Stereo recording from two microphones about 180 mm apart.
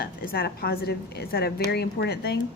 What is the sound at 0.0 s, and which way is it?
A woman's voice, 60° left (ahead or behind).